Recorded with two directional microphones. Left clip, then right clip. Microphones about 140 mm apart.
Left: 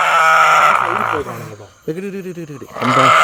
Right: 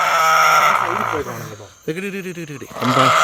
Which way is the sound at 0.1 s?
35° left (ahead or behind).